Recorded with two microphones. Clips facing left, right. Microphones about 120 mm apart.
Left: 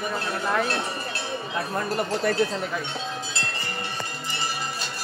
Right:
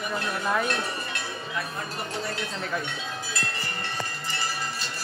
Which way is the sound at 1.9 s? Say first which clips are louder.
Left 10 dB; 55° left (ahead or behind).